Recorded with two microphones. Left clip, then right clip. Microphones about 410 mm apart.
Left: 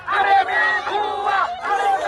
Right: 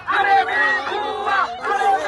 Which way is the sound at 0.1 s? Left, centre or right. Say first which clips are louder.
Even; left.